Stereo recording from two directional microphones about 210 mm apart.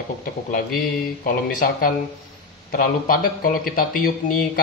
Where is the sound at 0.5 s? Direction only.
45° left (ahead or behind).